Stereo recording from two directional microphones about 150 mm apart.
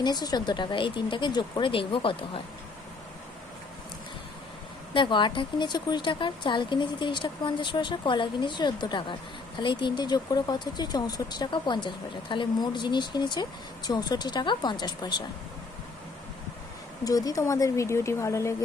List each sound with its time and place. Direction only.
0.0 s speech: 30° left (ahead or behind)
4.9 s speech: 30° left (ahead or behind)
17.0 s speech: 25° left (ahead or behind)